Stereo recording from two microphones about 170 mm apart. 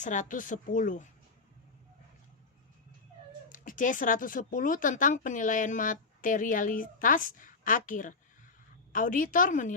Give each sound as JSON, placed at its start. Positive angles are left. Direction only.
{"t": 0.0, "sound": "speech", "side_deg": 50}
{"t": 3.5, "sound": "speech", "side_deg": 50}